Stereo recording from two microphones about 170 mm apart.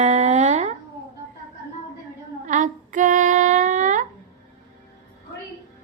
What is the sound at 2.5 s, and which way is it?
Female singing, 50° right (ahead or behind).